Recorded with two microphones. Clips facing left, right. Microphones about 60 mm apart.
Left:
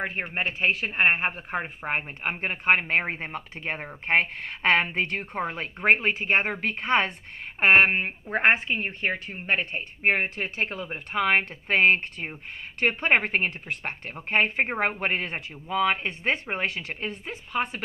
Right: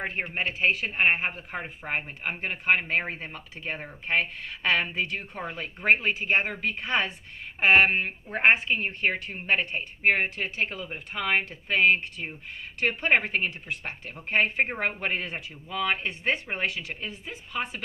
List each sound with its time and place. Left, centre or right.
0.2 s speech: left
7.9 s speech: left